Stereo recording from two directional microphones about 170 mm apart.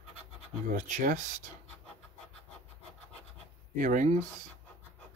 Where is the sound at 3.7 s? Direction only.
50° right (ahead or behind).